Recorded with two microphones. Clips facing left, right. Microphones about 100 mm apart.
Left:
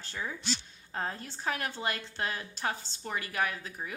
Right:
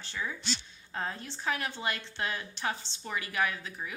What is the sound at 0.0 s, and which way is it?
A woman's voice, 45° left (ahead or behind).